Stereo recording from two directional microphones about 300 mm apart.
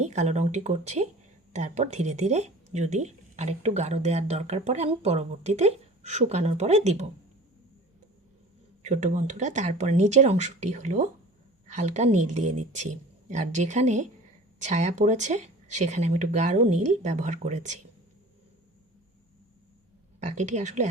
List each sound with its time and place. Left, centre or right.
0.0 s speech: right
8.8 s speech: right
20.1 s speech: right